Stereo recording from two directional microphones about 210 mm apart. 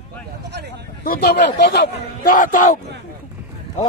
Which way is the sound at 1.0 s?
45° left (ahead or behind).